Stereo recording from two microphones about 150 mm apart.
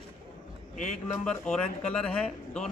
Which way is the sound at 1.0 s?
5° left (ahead or behind).